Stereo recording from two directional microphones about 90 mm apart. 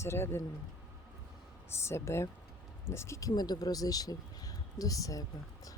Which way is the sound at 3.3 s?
50° left (ahead or behind).